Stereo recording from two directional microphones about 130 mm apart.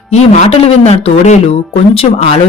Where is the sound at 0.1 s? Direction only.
55° left (ahead or behind).